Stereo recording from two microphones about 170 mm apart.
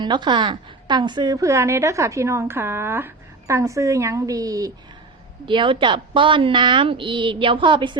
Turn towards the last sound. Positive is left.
turn(degrees=-30)  # may be behind; listen again after turning